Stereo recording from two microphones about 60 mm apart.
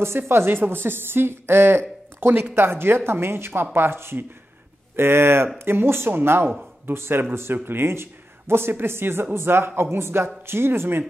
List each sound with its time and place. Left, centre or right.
0.3 s a woman's voice: right